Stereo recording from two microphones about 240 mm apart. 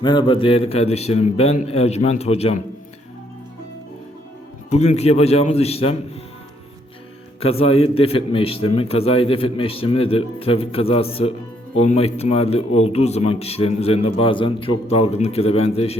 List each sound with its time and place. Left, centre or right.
0.0 s a man's voice: centre
4.7 s a man's voice: left
7.3 s a man's voice: left